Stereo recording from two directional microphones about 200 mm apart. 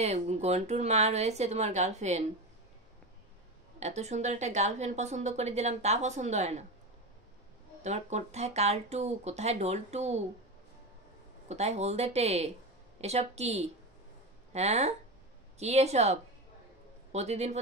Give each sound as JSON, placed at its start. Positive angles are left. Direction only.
{"t": 0.0, "sound": "a woman's voice", "side_deg": -30}
{"t": 3.8, "sound": "a woman's voice", "side_deg": -35}
{"t": 7.8, "sound": "a woman's voice", "side_deg": -35}
{"t": 11.4, "sound": "a woman's voice", "side_deg": -35}